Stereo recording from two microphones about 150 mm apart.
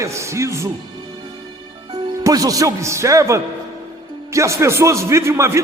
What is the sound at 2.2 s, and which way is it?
A man's voice, 25° right (ahead or behind).